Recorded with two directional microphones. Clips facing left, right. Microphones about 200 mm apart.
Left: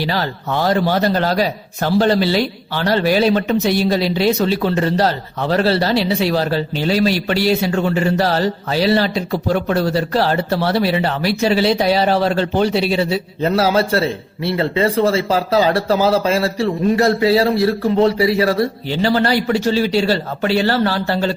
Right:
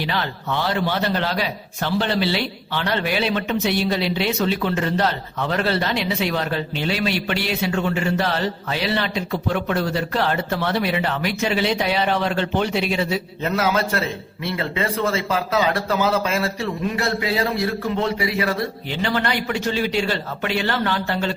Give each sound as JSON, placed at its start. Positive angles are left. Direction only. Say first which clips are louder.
{"t": 0.0, "sound": "a man's voice", "louder": "left 4 dB", "side_deg": 40}